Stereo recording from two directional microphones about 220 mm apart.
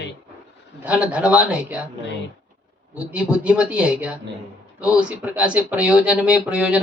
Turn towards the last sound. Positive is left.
turn(degrees=-5)  # may be behind; listen again after turning